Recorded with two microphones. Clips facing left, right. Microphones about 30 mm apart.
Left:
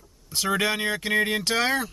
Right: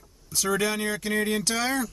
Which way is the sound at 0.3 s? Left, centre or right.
Left.